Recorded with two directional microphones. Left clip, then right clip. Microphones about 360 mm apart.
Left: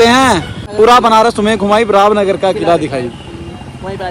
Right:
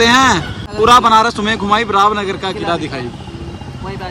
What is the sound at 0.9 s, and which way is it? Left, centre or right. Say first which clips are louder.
Speech: left 1 dB; centre.